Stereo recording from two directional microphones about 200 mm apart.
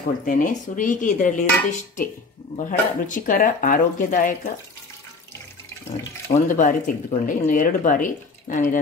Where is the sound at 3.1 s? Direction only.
40° left (ahead or behind).